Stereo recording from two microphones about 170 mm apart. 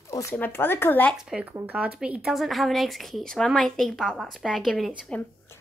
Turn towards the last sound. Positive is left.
turn(degrees=10)  # may be behind; listen again after turning